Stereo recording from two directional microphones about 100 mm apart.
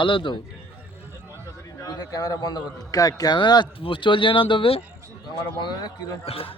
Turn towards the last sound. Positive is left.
turn(degrees=70)  # may be behind; listen again after turning